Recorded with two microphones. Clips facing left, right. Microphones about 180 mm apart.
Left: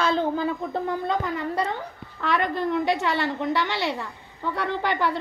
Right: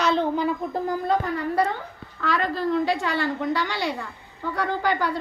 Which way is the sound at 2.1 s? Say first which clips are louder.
Even; 20° left (ahead or behind).